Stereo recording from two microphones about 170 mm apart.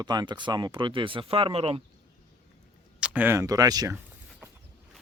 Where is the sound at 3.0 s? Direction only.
10° right (ahead or behind).